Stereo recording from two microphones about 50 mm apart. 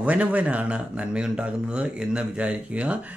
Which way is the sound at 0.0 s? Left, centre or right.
Right.